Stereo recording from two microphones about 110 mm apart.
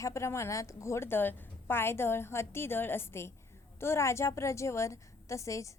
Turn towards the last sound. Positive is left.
turn(degrees=30)  # may be behind; listen again after turning